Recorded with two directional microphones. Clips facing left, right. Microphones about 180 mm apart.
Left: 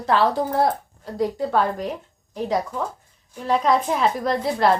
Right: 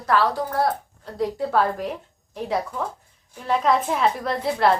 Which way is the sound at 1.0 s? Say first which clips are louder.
Left 2 dB; centre (ahead or behind).